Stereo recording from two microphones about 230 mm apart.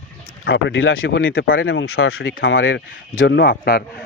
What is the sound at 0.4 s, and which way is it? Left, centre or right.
Speech, left.